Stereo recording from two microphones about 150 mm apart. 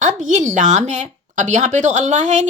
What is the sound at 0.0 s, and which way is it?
A woman's voice, 55° right (ahead or behind).